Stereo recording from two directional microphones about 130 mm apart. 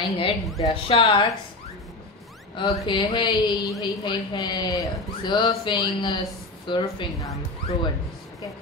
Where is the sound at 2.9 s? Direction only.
35° left (ahead or behind).